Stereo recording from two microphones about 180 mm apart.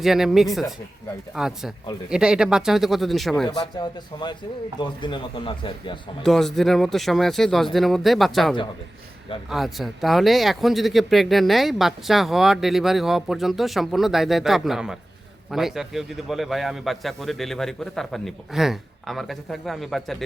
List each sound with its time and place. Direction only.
0.0 s speech: centre (ahead or behind)
3.4 s a man's voice: 25° left (ahead or behind)
6.2 s speech: centre (ahead or behind)